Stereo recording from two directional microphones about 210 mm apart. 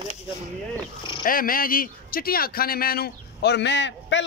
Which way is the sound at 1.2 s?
40° left (ahead or behind).